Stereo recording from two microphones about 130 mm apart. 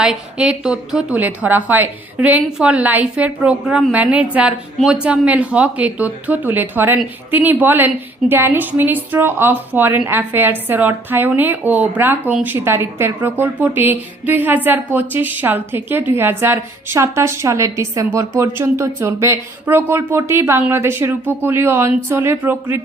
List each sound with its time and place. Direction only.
0.0 s a woman's voice: 5° right (ahead or behind)